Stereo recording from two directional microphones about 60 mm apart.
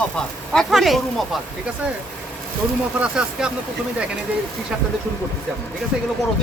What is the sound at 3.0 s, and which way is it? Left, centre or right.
Speech, centre.